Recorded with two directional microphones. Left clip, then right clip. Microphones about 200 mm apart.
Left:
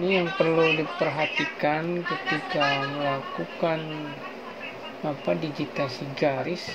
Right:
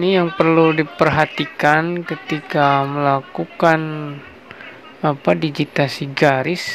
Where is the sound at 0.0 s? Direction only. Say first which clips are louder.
Right 8 dB; 30° right (ahead or behind).